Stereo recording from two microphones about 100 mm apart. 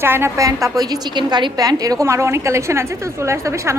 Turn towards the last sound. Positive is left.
turn(degrees=-30)  # may be behind; listen again after turning